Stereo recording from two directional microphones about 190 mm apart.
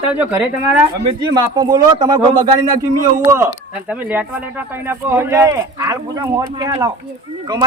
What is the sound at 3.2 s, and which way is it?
Speech, 15° right (ahead or behind).